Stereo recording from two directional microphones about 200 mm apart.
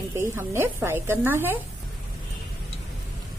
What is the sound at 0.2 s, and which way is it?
A woman's voice, 10° right (ahead or behind).